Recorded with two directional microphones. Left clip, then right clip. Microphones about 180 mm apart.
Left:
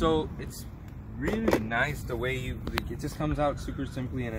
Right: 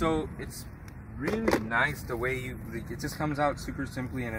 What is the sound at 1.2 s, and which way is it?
Speech, centre (ahead or behind).